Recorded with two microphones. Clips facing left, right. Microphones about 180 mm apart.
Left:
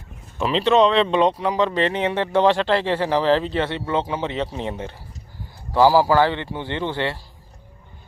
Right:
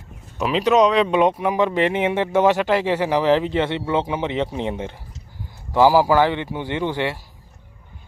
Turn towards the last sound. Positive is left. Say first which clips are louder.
# right 2 dB
turn(degrees=-10)  # may be behind; listen again after turning